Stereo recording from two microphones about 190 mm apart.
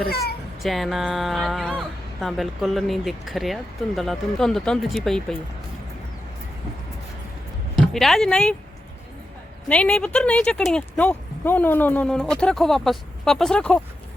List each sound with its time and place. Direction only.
0.1 s speech: 55° left (ahead or behind)
0.6 s speech: centre (ahead or behind)
7.9 s speech: centre (ahead or behind)
9.6 s speech: 5° left (ahead or behind)